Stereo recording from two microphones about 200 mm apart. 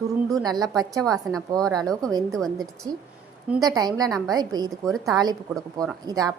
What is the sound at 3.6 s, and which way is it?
A woman's voice, 20° right (ahead or behind).